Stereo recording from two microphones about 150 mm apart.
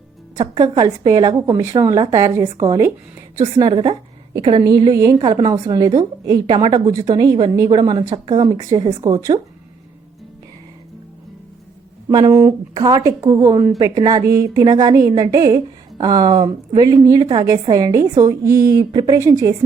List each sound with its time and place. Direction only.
0.3 s a woman's voice: 30° right (ahead or behind)
12.0 s a woman's voice: 20° right (ahead or behind)
13.7 s a woman's voice: 30° right (ahead or behind)